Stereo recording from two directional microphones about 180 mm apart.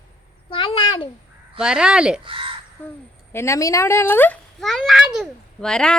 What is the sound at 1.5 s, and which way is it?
Speech, 5° right (ahead or behind).